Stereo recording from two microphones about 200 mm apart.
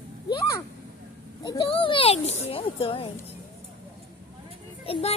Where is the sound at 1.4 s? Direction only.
25° left (ahead or behind).